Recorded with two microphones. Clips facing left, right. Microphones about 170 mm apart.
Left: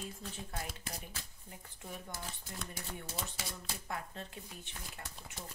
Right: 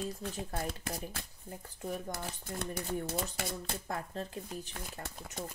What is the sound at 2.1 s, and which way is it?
Speech, 60° right (ahead or behind).